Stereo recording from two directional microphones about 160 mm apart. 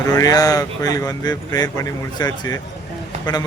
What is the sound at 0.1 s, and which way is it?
Speech, 20° left (ahead or behind).